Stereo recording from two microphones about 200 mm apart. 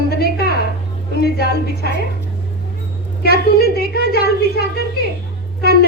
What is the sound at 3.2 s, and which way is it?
A child's voice, 50° left (ahead or behind).